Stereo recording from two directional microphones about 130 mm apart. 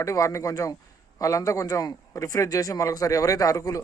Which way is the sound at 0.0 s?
25° left (ahead or behind).